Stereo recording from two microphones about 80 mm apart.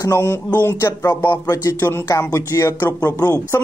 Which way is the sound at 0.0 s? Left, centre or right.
Left.